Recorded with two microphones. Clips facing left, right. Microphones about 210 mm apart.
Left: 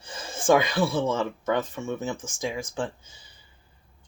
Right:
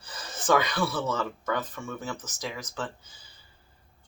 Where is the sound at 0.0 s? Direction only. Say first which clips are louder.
Left 7 dB; 25° left (ahead or behind).